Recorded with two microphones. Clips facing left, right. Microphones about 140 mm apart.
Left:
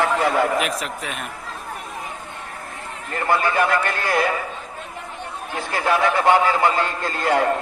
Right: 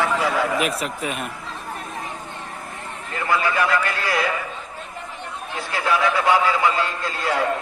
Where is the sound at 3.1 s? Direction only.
45° left (ahead or behind).